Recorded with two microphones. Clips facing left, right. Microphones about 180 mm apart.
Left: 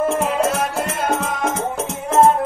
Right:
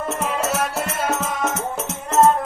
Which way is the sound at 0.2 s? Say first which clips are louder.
Left 4 dB; centre (ahead or behind).